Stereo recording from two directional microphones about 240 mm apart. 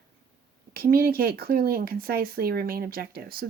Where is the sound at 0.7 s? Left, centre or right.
Right.